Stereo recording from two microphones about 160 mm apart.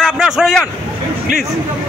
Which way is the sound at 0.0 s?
Centre (ahead or behind).